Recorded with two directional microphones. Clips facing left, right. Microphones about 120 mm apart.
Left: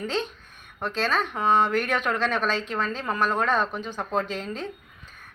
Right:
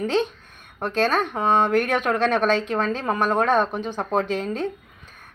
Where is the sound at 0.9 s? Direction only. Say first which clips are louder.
Right 5 dB; 50° right (ahead or behind).